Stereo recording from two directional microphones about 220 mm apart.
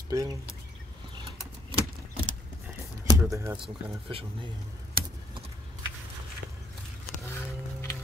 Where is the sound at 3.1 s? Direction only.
15° right (ahead or behind).